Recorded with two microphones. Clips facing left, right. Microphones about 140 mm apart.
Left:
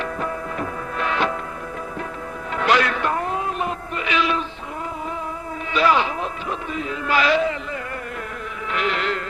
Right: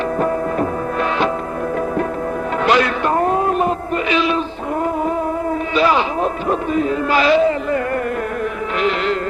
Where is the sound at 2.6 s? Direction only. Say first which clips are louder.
Right 3 dB; 25° right (ahead or behind).